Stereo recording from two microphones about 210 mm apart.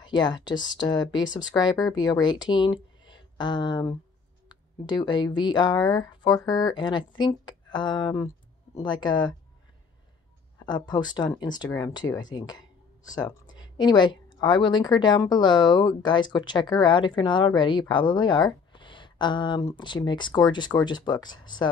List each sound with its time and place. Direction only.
0.0 s a woman's voice: 20° left (ahead or behind)
10.6 s a woman's voice: 20° left (ahead or behind)